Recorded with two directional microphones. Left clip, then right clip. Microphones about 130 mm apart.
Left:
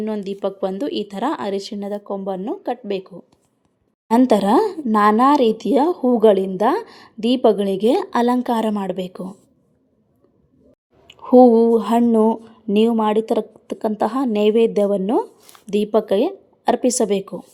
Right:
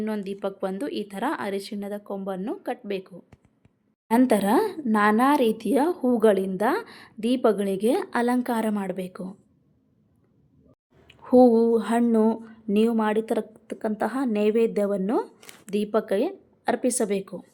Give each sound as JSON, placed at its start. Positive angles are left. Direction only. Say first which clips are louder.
{"t": 0.0, "sound": "a woman's voice", "louder": "left 6 dB", "side_deg": 20}
{"t": 11.2, "sound": "a woman's voice", "louder": "left 6 dB", "side_deg": 30}
{"t": 12.0, "sound": "a woman's voice", "louder": "left 6 dB", "side_deg": 15}